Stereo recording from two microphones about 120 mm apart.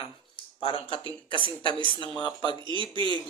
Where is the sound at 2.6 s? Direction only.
45° right (ahead or behind).